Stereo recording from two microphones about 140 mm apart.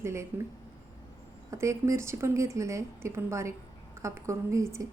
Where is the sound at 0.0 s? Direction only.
20° right (ahead or behind).